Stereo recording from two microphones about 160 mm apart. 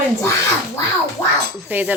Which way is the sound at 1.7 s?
10° right (ahead or behind).